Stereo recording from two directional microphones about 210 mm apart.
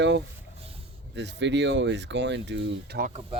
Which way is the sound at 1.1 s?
60° right (ahead or behind).